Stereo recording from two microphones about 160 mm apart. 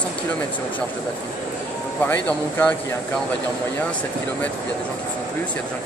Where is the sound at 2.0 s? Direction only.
10° left (ahead or behind).